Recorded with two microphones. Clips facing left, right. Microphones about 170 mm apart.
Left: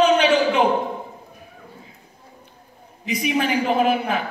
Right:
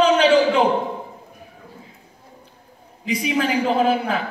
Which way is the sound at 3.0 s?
30° right (ahead or behind).